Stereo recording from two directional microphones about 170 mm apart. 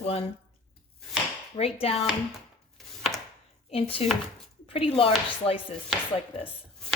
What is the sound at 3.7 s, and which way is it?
Speech, 35° left (ahead or behind).